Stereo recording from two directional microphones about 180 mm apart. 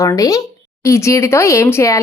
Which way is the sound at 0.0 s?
20° left (ahead or behind).